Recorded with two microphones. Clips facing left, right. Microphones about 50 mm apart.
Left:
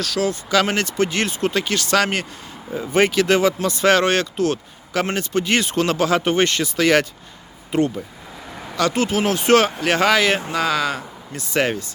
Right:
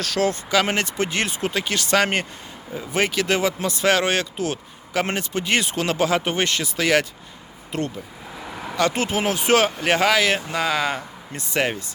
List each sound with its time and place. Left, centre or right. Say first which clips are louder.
0.0 s speech: even; right
0.5 s speech: left 5 dB; centre
2.7 s speech: left 5 dB; centre
7.7 s speech: left 7 dB; centre
8.7 s speech: left 2 dB; right
10.1 s speech: left 2 dB; centre
10.5 s speech: left 2 dB; centre
11.5 s speech: left 3 dB; centre